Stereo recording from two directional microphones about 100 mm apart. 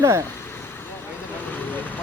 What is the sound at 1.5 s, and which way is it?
Vehicle, 20° left (ahead or behind).